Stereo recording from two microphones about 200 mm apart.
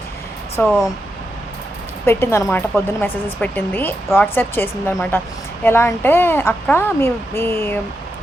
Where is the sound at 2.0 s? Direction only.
10° left (ahead or behind).